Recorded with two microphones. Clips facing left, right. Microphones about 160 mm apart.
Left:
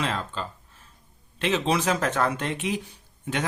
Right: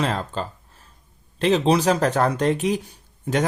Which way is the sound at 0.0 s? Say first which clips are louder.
Right 5 dB; 40° right (ahead or behind).